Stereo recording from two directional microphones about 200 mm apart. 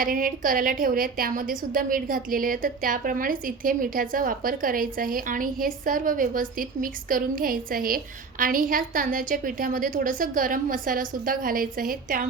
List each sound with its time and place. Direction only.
0.0 s a woman's voice: 45° right (ahead or behind)